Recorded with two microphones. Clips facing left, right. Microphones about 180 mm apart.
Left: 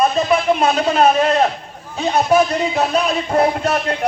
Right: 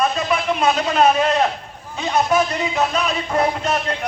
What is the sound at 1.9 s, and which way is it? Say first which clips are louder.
A man's voice: left 3 dB; 35° left (ahead or behind).